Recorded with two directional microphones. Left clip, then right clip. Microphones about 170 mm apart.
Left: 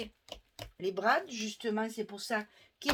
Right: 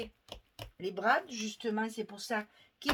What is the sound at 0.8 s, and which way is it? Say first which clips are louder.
Speech: even; 40° left (ahead or behind).